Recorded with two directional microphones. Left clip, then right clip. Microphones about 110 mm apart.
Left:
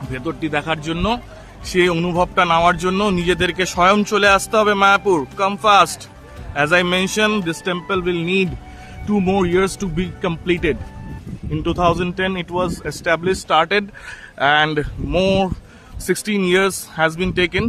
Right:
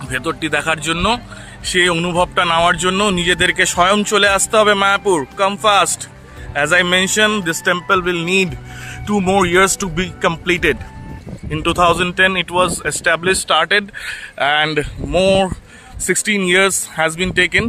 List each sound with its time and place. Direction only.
0.1 s speech: 30° right (ahead or behind)
0.9 s speech: 15° right (ahead or behind)
2.4 s speech: 5° right (ahead or behind)
7.9 s speech: 30° right (ahead or behind)
9.4 s a man's voice: 45° right (ahead or behind); by 13.4 s 25° right (ahead or behind)
13.5 s speech: 15° right (ahead or behind)
13.7 s speech: 5° right (ahead or behind)
16.0 s speech: 10° right (ahead or behind)